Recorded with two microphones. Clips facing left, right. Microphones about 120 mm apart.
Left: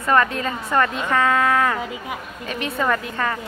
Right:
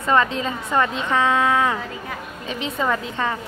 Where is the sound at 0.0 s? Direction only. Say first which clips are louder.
Even; 20° right (ahead or behind).